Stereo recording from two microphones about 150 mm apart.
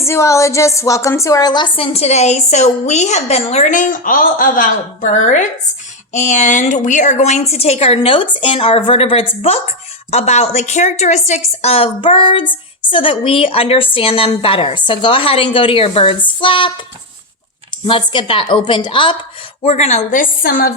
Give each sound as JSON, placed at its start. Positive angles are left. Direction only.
{"t": 0.0, "sound": "a woman's voice", "side_deg": 20}
{"t": 17.8, "sound": "a woman's voice", "side_deg": 35}
{"t": 19.6, "sound": "a woman's voice", "side_deg": 50}